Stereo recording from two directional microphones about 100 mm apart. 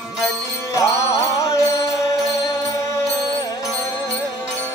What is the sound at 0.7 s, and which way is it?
Music, 30° left (ahead or behind).